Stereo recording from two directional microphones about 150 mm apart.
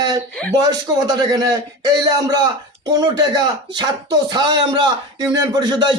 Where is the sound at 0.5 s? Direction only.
25° right (ahead or behind).